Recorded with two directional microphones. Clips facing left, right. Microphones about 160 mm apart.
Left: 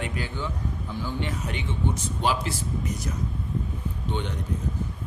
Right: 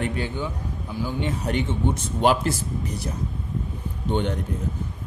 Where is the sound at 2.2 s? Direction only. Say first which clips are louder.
Right 7 dB; 55° right (ahead or behind).